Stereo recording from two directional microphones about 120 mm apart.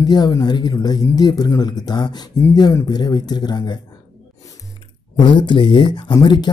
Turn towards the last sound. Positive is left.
turn(degrees=40)  # may be behind; listen again after turning